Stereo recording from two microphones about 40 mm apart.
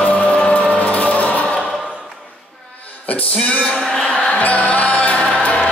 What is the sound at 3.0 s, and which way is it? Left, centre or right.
Music, left.